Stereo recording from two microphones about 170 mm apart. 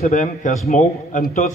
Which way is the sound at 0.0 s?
50° left (ahead or behind).